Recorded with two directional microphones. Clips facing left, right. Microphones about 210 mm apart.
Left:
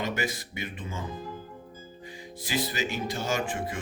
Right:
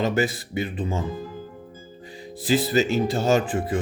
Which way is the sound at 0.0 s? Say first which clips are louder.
Right 8 dB; 35° right (ahead or behind).